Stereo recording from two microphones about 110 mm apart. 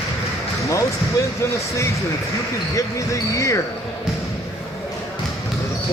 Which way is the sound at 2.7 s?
30° left (ahead or behind).